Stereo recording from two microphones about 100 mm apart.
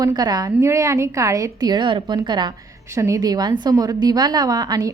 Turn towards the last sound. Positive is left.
turn(degrees=-40)  # may be behind; listen again after turning